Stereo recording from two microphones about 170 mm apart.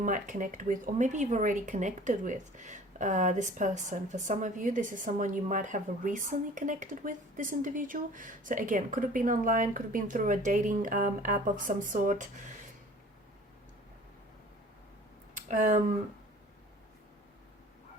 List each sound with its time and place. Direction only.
0.0 s speech: 50° right (ahead or behind)
15.4 s speech: 50° right (ahead or behind)